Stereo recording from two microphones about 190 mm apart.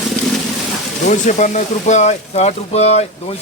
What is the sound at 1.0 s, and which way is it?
Speech, 40° left (ahead or behind).